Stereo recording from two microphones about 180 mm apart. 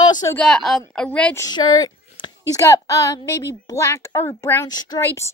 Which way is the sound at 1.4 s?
20° left (ahead or behind).